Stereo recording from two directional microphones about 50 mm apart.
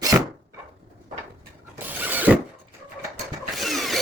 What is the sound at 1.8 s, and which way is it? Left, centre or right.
Mechanisms, right.